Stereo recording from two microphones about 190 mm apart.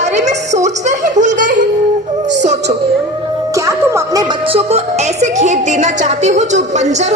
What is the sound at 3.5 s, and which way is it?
Music, 15° right (ahead or behind).